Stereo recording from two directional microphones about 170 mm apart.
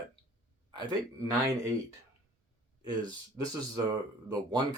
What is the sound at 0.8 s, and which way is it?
Speech, 20° right (ahead or behind).